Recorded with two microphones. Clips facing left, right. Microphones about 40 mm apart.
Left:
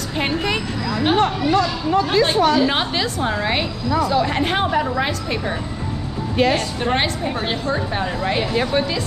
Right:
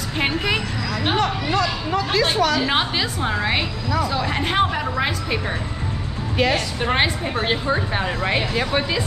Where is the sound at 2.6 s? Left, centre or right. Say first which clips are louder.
Left 2 dB; centre.